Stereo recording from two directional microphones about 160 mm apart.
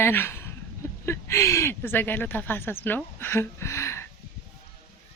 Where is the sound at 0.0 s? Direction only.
15° left (ahead or behind).